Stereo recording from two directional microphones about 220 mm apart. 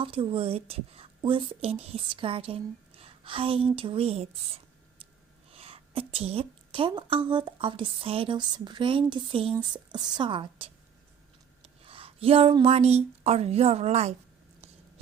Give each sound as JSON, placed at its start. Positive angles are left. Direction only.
{"t": 0.0, "sound": "a woman's voice", "side_deg": -25}